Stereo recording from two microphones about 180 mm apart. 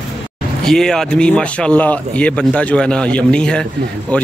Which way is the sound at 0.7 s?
5° left (ahead or behind).